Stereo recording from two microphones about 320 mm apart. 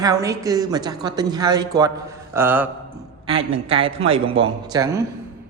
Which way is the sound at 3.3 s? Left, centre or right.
Centre.